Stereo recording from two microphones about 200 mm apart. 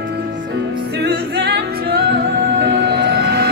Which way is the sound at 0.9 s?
55° right (ahead or behind).